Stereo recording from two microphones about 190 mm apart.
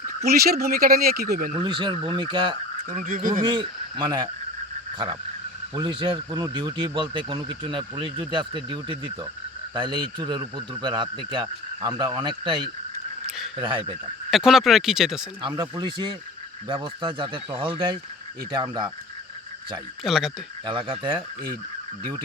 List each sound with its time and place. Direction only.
0.3 s speech: 55° right (ahead or behind)
1.5 s speech: 25° right (ahead or behind)
2.9 s speech: 40° right (ahead or behind)
3.4 s speech: 25° right (ahead or behind)
5.7 s speech: 25° right (ahead or behind)
14.3 s speech: centre (ahead or behind)
15.4 s speech: 25° right (ahead or behind)
20.1 s speech: centre (ahead or behind)
20.7 s speech: 25° right (ahead or behind)